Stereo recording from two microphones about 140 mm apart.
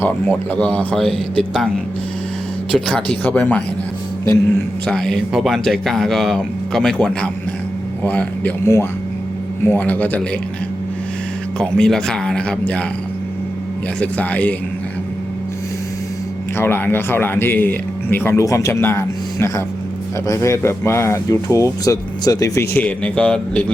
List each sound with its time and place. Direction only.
0.0 s speech: 10° left (ahead or behind)
2.7 s speech: 5° left (ahead or behind)
4.9 s speech: 5° left (ahead or behind)
11.8 s speech: 5° left (ahead or behind)
14.0 s speech: 10° left (ahead or behind)
16.6 s speech: 15° left (ahead or behind)